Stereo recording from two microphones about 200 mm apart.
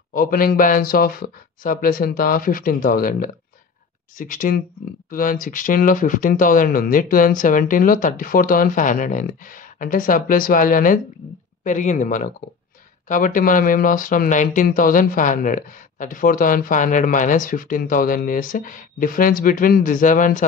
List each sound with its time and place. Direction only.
0.1 s speech: 45° left (ahead or behind)